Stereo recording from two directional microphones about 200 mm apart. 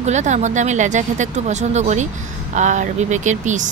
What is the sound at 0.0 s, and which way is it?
Speech, 35° right (ahead or behind).